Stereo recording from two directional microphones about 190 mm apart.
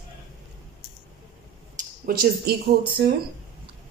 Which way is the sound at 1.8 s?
50° right (ahead or behind).